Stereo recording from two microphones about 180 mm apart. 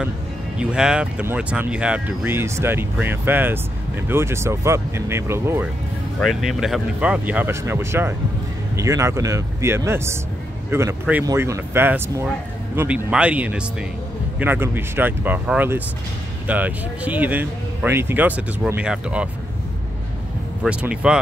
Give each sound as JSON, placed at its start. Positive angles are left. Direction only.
{"t": 0.6, "sound": "speech", "side_deg": -5}
{"t": 6.1, "sound": "speech", "side_deg": 0}
{"t": 20.6, "sound": "speech", "side_deg": -5}